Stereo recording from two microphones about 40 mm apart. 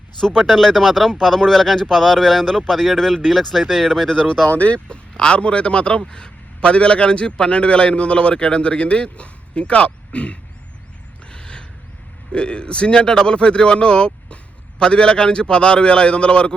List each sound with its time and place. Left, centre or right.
0.2 s speech: centre
4.5 s speech: left
4.9 s a man's voice: left
11.3 s a sound: left
12.3 s a man's voice: left